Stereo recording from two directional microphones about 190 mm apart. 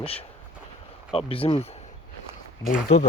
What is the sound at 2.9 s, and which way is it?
Speech, 35° left (ahead or behind).